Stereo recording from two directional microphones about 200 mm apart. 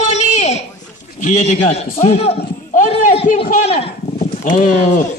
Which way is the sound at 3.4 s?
35° left (ahead or behind).